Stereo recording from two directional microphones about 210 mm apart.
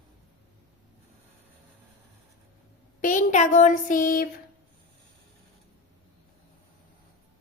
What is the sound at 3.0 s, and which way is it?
Speech, 35° left (ahead or behind).